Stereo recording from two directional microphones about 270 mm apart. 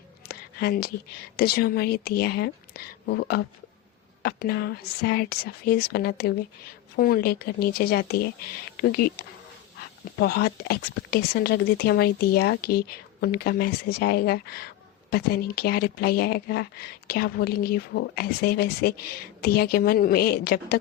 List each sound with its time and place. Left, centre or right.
0.3 s a sound: left
1.4 s speech: left
10.2 s speech: left